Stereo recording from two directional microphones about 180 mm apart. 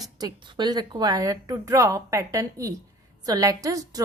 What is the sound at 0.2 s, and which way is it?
A woman's voice, 25° right (ahead or behind).